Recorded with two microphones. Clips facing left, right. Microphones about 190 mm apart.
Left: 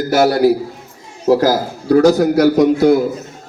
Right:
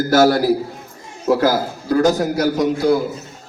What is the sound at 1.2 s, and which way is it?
Speech, 40° left (ahead or behind).